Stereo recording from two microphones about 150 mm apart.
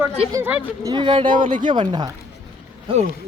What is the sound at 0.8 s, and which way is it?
Speech, 30° right (ahead or behind).